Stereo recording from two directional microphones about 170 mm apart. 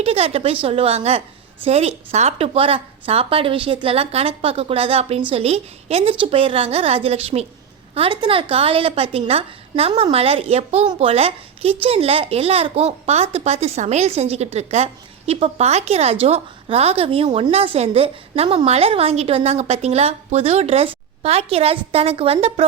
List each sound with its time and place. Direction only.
0.0 s a woman's voice: 35° right (ahead or behind)